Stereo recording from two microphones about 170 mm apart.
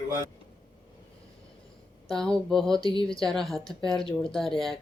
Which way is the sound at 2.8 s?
30° left (ahead or behind).